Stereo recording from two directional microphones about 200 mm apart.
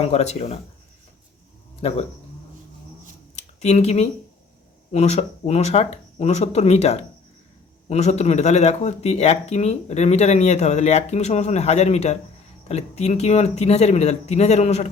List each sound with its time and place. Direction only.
0.0 s speech: 35° left (ahead or behind)
1.8 s speech: 30° left (ahead or behind)
3.3 s speech: 35° left (ahead or behind)